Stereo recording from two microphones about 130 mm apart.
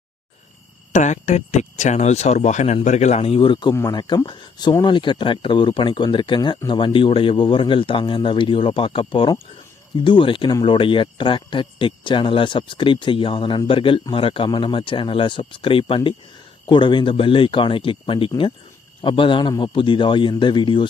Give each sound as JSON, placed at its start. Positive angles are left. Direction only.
{"t": 0.9, "sound": "speech", "side_deg": 65}